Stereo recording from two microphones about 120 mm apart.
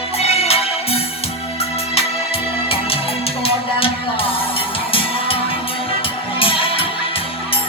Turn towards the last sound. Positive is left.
turn(degrees=50)  # may be behind; listen again after turning